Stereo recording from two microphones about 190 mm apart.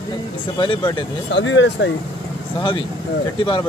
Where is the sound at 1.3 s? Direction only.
75° left (ahead or behind).